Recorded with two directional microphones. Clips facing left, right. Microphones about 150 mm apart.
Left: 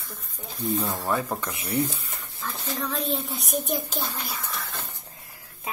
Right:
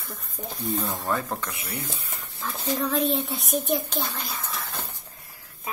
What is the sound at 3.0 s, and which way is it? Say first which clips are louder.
A child's voice: right 3 dB; centre (ahead or behind).